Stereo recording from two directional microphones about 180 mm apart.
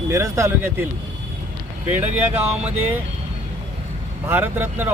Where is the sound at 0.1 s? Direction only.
15° right (ahead or behind).